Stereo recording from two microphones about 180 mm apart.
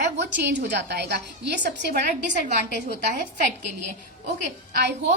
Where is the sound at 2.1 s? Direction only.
45° right (ahead or behind).